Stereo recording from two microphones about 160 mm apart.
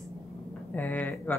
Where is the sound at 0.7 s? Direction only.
10° left (ahead or behind).